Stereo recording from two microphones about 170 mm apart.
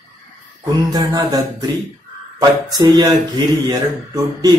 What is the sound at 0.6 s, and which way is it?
Speech, 25° right (ahead or behind).